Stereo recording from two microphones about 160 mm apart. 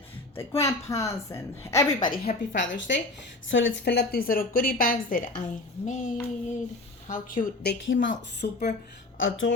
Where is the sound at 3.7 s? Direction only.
90° left; by 5.4 s 60° left (ahead or behind).